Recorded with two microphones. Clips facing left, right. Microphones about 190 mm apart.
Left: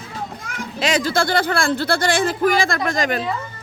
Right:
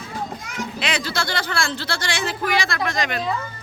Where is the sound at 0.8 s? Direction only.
45° left (ahead or behind).